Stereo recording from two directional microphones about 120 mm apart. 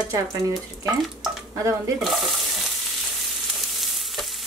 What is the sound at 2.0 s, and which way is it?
Frying, centre (ahead or behind).